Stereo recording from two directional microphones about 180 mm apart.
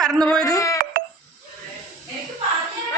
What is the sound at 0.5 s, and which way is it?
Speech, 15° left (ahead or behind).